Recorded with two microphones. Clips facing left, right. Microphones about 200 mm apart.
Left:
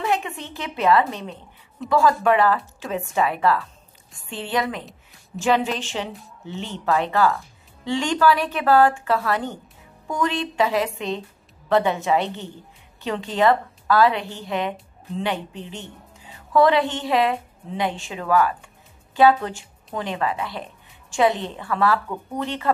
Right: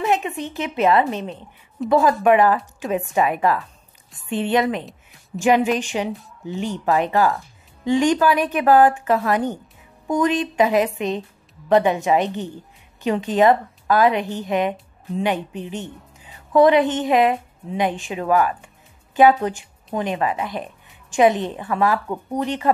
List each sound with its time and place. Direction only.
0.0 s a woman's voice: 20° right (ahead or behind)